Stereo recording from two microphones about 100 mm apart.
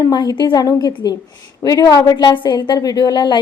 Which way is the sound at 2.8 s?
40° left (ahead or behind).